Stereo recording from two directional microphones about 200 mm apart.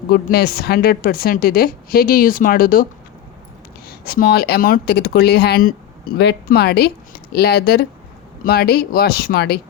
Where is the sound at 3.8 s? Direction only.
50° left (ahead or behind).